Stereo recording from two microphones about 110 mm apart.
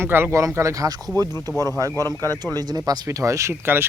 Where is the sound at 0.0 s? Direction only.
20° right (ahead or behind).